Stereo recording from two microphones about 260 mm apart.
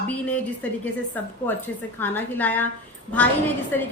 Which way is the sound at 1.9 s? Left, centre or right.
Centre.